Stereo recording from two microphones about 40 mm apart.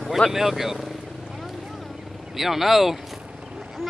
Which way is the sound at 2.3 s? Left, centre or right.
Centre.